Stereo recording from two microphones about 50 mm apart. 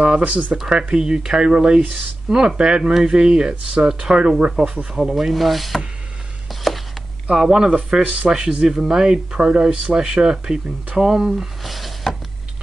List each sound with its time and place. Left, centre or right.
0.2 s speech: right
0.6 s speech: centre
4.9 s speech: centre
6.5 s a sound: centre
7.2 s speech: centre
11.6 s a sound: centre